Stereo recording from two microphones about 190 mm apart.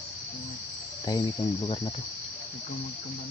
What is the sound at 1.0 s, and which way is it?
Speech, 25° left (ahead or behind).